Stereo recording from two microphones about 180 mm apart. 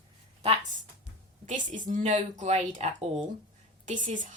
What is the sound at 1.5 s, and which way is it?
Speech, 45° right (ahead or behind).